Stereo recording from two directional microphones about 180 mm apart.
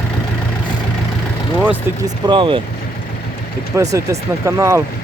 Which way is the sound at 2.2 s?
25° right (ahead or behind).